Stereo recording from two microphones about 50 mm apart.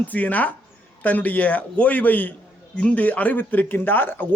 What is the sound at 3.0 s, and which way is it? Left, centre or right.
A man's voice, left.